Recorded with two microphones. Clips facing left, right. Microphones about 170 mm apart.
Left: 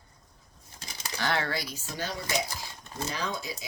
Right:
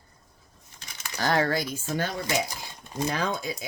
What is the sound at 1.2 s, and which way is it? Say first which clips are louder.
Speech: right 6 dB; 40° right (ahead or behind).